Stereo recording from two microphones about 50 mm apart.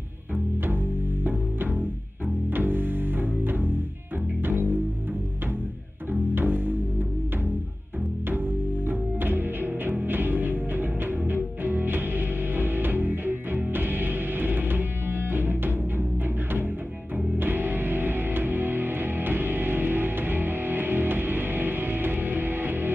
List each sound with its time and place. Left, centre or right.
1.2 s music: right
6.3 s music: right
8.3 s music: right
17.4 s music: right